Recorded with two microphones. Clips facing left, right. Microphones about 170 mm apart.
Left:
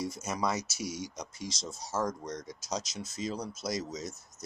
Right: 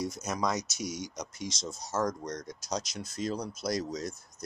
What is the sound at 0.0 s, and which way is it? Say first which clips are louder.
Speech: right 1 dB; 5° left (ahead or behind).